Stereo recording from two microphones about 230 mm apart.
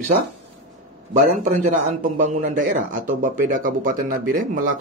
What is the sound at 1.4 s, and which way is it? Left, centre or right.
Speech, right.